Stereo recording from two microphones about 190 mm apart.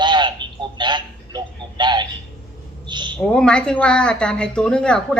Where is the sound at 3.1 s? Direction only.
5° left (ahead or behind).